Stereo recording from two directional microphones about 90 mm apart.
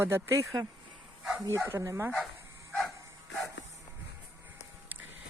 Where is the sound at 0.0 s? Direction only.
30° right (ahead or behind).